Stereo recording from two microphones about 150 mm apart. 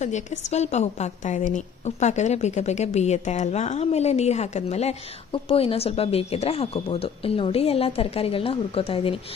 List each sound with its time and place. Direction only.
0.0 s a woman's voice: 50° left (ahead or behind)